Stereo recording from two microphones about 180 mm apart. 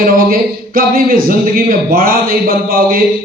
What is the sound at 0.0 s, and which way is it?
A man's voice, 55° right (ahead or behind).